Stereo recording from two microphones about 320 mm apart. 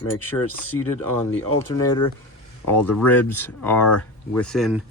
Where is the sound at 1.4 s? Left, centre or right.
Centre.